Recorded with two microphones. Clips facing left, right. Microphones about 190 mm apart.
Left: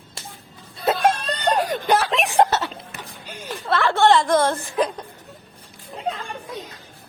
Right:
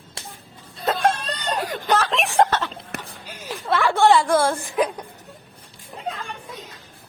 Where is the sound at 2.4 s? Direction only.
10° left (ahead or behind).